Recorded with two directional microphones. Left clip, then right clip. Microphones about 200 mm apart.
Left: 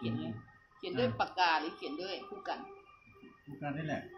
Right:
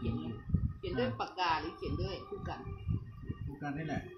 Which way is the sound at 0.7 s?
50° left (ahead or behind).